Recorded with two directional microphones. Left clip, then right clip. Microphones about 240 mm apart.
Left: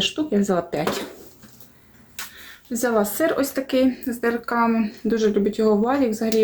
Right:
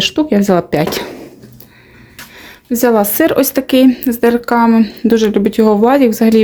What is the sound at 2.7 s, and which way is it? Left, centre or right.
Speech, right.